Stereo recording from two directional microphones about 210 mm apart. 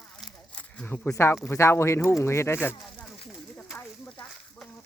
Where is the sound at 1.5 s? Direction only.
10° left (ahead or behind).